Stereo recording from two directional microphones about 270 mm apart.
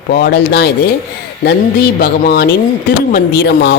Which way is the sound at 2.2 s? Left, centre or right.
Left.